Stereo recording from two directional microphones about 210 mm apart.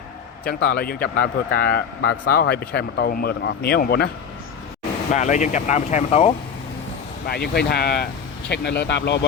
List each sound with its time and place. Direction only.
0.7 s speech: 45° left (ahead or behind)
5.1 s speech: 35° left (ahead or behind)
7.3 s speech: 50° left (ahead or behind)